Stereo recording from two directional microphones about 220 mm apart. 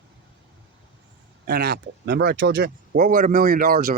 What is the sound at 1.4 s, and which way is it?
Speech, 45° right (ahead or behind).